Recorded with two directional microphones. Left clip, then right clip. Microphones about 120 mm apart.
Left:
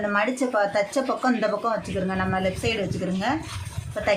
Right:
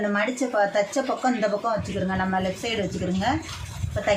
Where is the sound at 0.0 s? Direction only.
30° left (ahead or behind).